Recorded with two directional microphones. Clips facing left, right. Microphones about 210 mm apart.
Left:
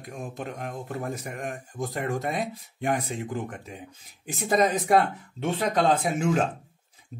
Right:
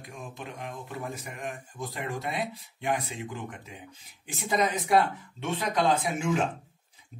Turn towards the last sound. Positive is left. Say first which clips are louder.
# left 6 dB
turn(degrees=45)  # may be behind; listen again after turning